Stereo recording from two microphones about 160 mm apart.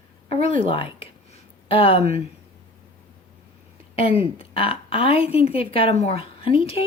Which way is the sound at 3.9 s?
35° left (ahead or behind).